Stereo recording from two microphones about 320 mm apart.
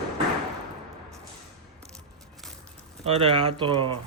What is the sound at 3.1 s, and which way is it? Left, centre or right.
Speech, centre.